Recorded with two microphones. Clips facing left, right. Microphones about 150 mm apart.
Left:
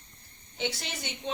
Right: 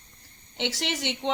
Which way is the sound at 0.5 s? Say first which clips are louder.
Right 4 dB; 80° right.